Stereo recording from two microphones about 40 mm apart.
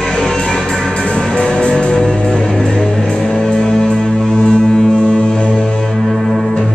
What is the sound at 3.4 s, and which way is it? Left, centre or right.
Music, centre.